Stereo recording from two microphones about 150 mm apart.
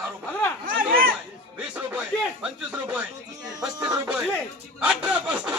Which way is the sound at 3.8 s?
25° right (ahead or behind).